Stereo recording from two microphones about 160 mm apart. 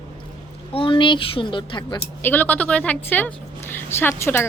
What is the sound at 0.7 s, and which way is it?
Speech, 30° left (ahead or behind).